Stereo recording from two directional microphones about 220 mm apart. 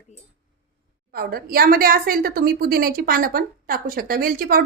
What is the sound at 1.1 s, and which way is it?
A woman's voice, 45° right (ahead or behind).